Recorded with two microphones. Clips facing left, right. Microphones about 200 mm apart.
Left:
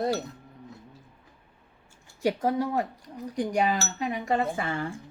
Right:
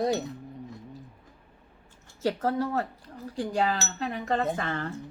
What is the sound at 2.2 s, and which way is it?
Speech, 15° left (ahead or behind).